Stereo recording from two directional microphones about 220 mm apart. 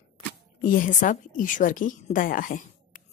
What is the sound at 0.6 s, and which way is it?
A woman's voice, 35° left (ahead or behind).